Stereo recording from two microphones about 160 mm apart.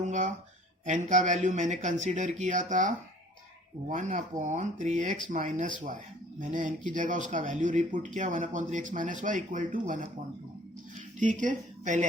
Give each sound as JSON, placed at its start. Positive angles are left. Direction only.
{"t": 0.0, "sound": "a sound", "side_deg": -50}
{"t": 0.9, "sound": "speech", "side_deg": -50}
{"t": 11.2, "sound": "speech", "side_deg": -50}